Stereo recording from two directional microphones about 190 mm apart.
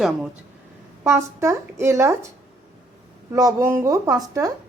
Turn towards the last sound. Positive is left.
turn(degrees=-20)  # may be behind; listen again after turning